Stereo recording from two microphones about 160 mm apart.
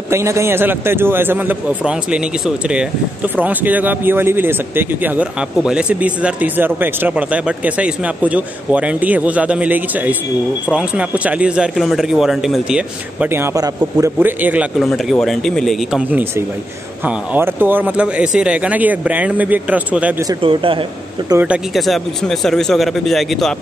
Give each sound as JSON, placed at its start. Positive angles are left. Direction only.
{"t": 0.1, "sound": "a man's voice", "side_deg": -15}
{"t": 16.1, "sound": "speech", "side_deg": -10}
{"t": 20.4, "sound": "speech", "side_deg": -35}
{"t": 21.4, "sound": "a man's voice", "side_deg": -5}